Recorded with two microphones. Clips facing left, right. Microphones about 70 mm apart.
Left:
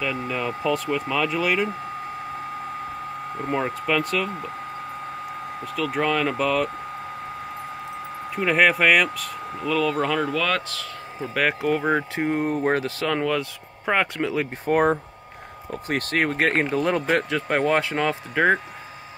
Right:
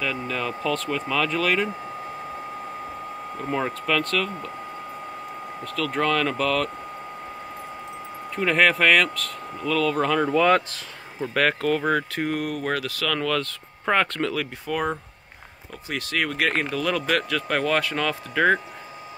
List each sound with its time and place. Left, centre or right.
0.0 s speech: centre
3.3 s speech: centre
5.6 s speech: centre
8.4 s speech: centre
10.2 s speech: centre
11.1 s speech: centre
14.7 s speech: left; by 18.6 s centre